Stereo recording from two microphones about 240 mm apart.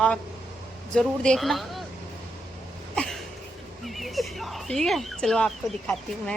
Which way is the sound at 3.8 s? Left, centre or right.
Centre.